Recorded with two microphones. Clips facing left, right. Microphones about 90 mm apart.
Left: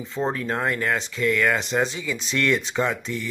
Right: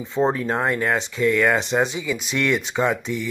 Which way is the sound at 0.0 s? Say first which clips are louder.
Right 5 dB; 20° right (ahead or behind).